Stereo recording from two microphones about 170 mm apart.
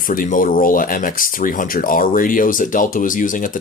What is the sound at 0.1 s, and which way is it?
Speech, 55° left (ahead or behind).